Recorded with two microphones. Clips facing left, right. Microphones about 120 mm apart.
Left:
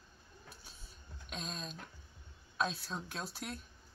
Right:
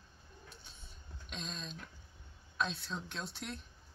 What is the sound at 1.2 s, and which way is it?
Speech, 45° left (ahead or behind).